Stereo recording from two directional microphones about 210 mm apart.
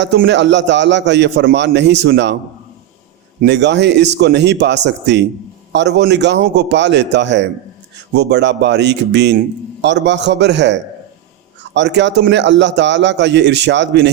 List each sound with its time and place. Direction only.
0.0 s a man's voice: 55° right (ahead or behind)
3.4 s a man's voice: 55° right (ahead or behind)